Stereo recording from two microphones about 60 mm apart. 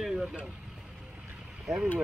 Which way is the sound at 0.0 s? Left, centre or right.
Centre.